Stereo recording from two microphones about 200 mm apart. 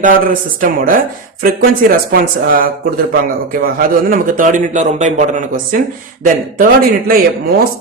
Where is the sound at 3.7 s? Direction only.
45° right (ahead or behind).